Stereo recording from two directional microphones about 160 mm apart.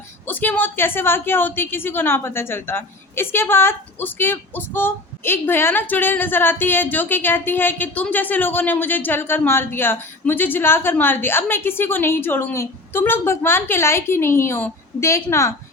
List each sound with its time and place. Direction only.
0.3 s a woman's voice: 10° left (ahead or behind)